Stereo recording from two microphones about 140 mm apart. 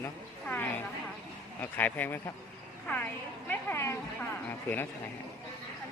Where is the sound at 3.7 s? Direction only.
15° left (ahead or behind).